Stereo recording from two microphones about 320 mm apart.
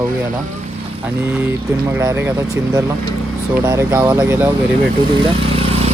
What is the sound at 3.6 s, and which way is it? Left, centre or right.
Speech, centre.